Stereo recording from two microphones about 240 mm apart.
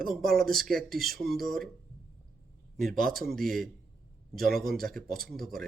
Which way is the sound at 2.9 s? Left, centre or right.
Right.